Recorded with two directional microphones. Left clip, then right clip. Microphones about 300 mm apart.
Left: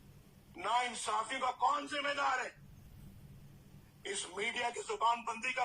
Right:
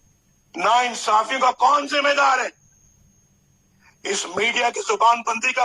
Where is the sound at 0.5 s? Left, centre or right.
Right.